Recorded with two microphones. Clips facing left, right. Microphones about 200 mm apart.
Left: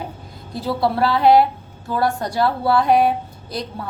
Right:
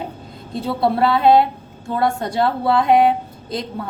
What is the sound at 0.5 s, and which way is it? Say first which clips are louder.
A woman's voice: right 1 dB; 25° right (ahead or behind).